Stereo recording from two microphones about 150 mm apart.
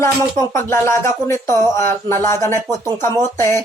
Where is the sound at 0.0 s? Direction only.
20° left (ahead or behind).